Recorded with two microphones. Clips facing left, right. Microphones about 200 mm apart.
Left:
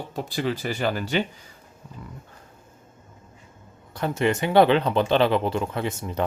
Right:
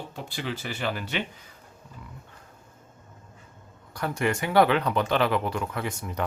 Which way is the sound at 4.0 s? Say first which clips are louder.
Left 4 dB; 25° left (ahead or behind).